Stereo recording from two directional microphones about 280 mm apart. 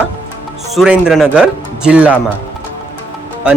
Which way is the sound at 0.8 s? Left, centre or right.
Centre.